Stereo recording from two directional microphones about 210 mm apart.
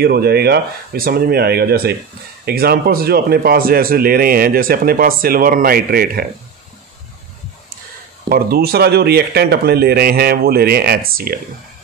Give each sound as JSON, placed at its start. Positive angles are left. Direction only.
{"t": 0.0, "sound": "speech", "side_deg": -50}
{"t": 8.3, "sound": "speech", "side_deg": -45}